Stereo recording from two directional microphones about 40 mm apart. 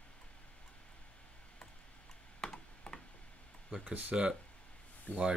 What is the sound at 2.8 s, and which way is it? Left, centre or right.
Tick-tock, left.